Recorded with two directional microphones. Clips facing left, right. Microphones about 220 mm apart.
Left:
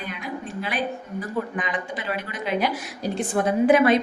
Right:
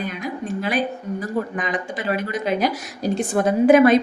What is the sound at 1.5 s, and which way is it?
A woman's voice, 45° right (ahead or behind).